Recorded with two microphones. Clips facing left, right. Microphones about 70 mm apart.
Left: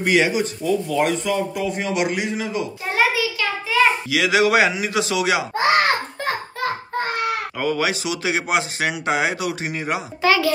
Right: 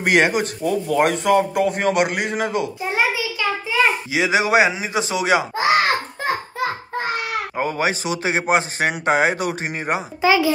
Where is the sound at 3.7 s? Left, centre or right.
Right.